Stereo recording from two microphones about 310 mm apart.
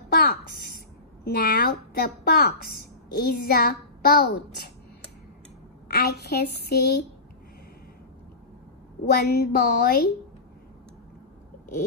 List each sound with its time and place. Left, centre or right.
0.1 s a sound: left
3.4 s a child's voice: left
5.9 s speech: left
9.0 s a woman's voice: left